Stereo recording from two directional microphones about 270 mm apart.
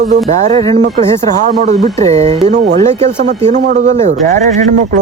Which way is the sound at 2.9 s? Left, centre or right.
Right.